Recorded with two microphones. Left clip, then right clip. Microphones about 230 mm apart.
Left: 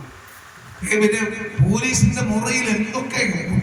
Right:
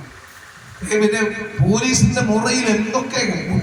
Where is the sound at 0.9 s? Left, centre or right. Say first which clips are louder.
Right 1 dB; right.